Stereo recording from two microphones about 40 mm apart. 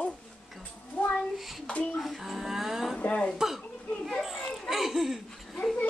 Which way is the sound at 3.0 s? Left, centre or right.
Left.